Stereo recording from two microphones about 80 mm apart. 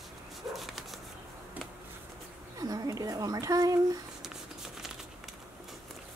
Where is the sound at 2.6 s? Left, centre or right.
Right.